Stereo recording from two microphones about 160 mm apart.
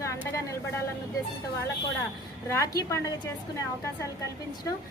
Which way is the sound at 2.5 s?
20° left (ahead or behind).